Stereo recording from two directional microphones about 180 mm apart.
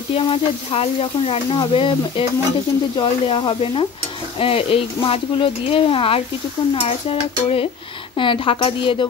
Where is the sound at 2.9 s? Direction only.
25° left (ahead or behind).